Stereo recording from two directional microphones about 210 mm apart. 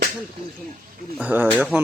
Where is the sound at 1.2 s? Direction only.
10° right (ahead or behind).